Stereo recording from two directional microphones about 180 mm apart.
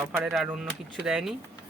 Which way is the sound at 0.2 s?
5° right (ahead or behind).